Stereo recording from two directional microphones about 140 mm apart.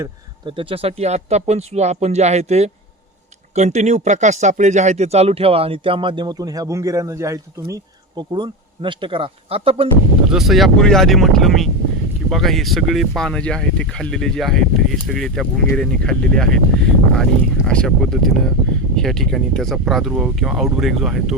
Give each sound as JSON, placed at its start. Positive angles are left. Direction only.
{"t": 0.4, "sound": "speech", "side_deg": -40}
{"t": 8.3, "sound": "speech", "side_deg": -35}
{"t": 10.2, "sound": "speech", "side_deg": 0}